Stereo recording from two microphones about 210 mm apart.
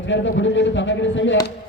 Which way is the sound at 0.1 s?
60° left (ahead or behind).